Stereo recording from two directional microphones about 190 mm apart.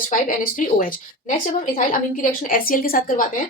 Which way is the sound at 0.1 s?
45° left (ahead or behind).